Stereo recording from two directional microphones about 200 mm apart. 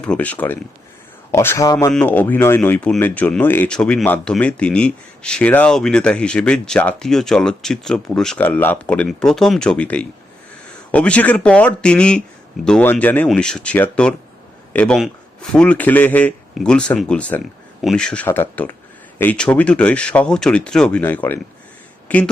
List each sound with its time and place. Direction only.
0.0 s speech: 5° left (ahead or behind)